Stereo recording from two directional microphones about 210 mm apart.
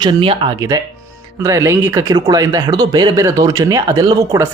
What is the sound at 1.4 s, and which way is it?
Speech, 15° right (ahead or behind).